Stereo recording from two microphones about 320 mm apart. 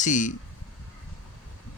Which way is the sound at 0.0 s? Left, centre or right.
Left.